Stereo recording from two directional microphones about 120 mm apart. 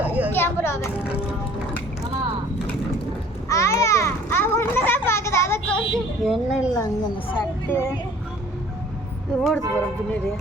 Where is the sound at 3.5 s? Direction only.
25° left (ahead or behind).